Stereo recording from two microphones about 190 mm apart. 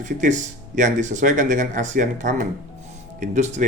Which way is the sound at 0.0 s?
40° right (ahead or behind).